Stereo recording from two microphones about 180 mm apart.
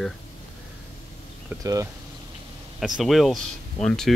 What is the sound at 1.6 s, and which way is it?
Speech, 20° right (ahead or behind).